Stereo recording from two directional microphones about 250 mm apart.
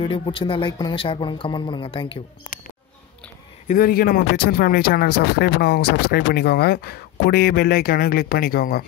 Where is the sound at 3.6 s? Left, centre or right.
Left.